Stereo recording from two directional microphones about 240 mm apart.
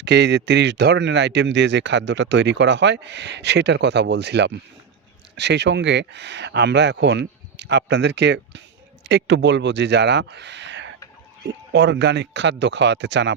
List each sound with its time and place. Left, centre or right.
0.0 s speech: right